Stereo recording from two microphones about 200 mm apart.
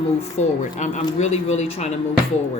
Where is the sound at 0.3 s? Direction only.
35° left (ahead or behind).